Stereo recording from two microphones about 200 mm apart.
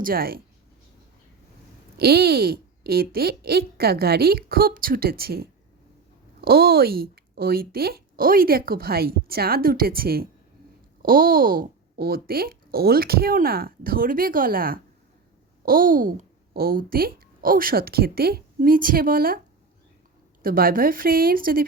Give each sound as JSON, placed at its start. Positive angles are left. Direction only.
{"t": 0.0, "sound": "speech", "side_deg": -50}
{"t": 2.0, "sound": "speech", "side_deg": -50}
{"t": 20.4, "sound": "speech", "side_deg": -45}